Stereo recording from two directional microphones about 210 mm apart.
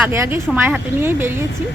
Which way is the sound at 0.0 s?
10° right (ahead or behind).